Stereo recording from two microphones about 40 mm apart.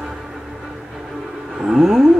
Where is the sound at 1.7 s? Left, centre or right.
Centre.